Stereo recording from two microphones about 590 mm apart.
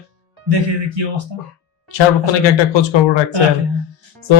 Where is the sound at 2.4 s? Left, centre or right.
Left.